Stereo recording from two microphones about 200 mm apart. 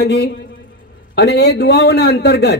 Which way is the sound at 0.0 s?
60° left (ahead or behind).